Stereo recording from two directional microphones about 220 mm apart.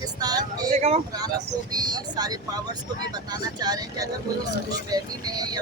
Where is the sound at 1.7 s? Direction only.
20° right (ahead or behind).